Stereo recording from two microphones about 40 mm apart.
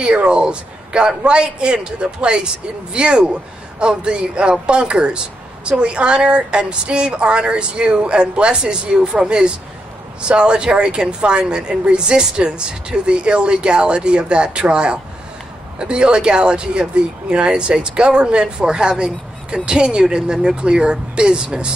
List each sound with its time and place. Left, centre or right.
0.0 s speech: right